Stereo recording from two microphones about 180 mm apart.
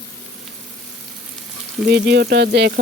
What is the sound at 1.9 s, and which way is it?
Sizzle, 65° right (ahead or behind).